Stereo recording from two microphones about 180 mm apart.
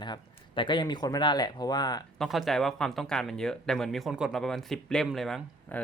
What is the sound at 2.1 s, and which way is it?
Speech, centre (ahead or behind).